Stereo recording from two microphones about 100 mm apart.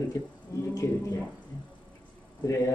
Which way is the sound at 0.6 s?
30° left (ahead or behind).